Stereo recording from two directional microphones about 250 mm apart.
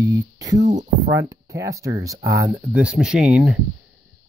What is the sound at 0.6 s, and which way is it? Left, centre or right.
Speech, right.